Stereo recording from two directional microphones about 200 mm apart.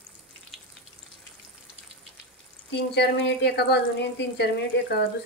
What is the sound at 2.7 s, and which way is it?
Speech, 55° left (ahead or behind).